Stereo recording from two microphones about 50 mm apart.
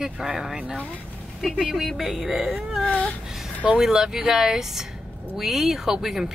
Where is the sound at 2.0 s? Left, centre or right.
Centre.